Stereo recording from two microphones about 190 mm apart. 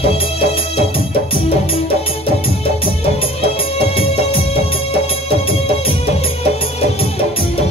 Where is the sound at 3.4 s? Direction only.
30° left (ahead or behind).